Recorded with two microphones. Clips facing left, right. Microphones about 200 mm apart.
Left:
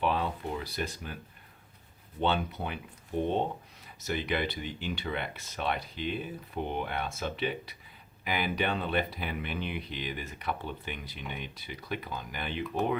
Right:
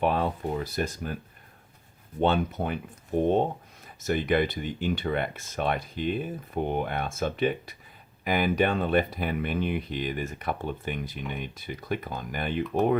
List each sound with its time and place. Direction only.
0.0 s speech: 50° right (ahead or behind)
2.2 s speech: 45° right (ahead or behind)